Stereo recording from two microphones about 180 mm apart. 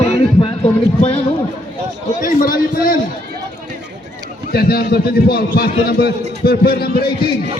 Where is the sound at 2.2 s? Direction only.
50° left (ahead or behind).